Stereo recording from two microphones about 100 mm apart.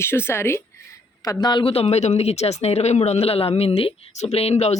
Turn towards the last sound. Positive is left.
turn(degrees=90)